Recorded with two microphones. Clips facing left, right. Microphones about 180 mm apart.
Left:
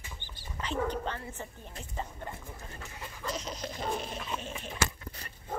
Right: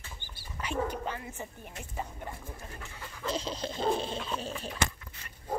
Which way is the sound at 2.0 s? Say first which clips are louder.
Even; 10° right (ahead or behind).